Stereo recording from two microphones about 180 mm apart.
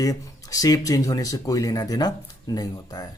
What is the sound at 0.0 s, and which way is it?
Speech, 20° left (ahead or behind).